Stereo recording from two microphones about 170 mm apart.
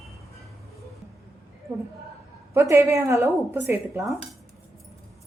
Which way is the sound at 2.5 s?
15° right (ahead or behind).